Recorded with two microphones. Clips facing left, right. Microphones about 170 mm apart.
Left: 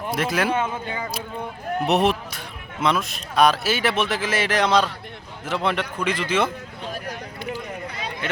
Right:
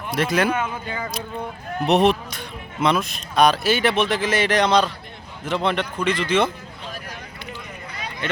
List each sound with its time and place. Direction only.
0.1 s speech: 5° left (ahead or behind)
0.5 s speech: 25° left (ahead or behind)
1.9 s a man's voice: 5° left (ahead or behind)
8.2 s speech: 5° left (ahead or behind)